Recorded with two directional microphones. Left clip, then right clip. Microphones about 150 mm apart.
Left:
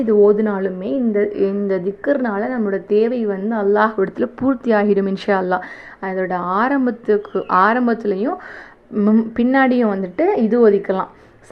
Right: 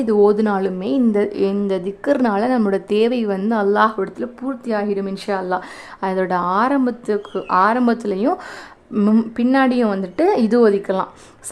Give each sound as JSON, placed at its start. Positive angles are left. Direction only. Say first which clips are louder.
{"t": 0.0, "sound": "a woman's voice", "louder": "left 2 dB", "side_deg": -15}
{"t": 4.2, "sound": "a woman's voice", "louder": "left 7 dB", "side_deg": 10}
{"t": 6.0, "sound": "speech", "louder": "right 2 dB", "side_deg": -25}
{"t": 9.3, "sound": "speech", "louder": "left 2 dB", "side_deg": -5}
{"t": 10.2, "sound": "speech", "louder": "left 1 dB", "side_deg": -25}